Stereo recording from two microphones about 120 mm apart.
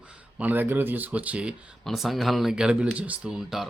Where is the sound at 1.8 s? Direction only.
Centre (ahead or behind).